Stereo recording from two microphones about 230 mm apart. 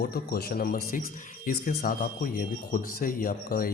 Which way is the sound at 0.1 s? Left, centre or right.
Left.